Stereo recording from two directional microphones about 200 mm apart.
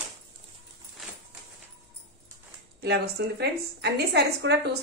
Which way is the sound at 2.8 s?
55° right (ahead or behind).